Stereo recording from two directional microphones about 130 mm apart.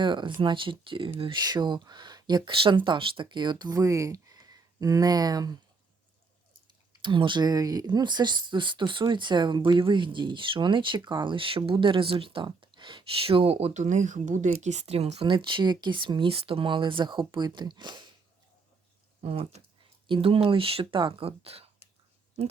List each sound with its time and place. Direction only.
0.0 s speech: 35° right (ahead or behind)
7.0 s speech: 35° right (ahead or behind)
19.2 s speech: 50° right (ahead or behind)
20.1 s speech: 40° right (ahead or behind)